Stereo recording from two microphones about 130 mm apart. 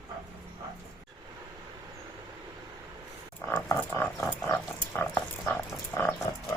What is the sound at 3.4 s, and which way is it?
Frog, 15° left (ahead or behind).